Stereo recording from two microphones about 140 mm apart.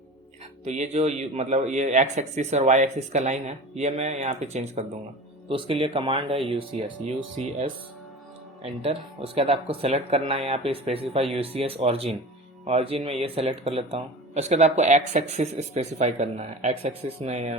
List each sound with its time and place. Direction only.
0.6 s a man's voice: 55° right (ahead or behind)
5.5 s speech: 40° right (ahead or behind)
7.0 s a man's voice: 55° right (ahead or behind)
8.6 s speech: 45° right (ahead or behind)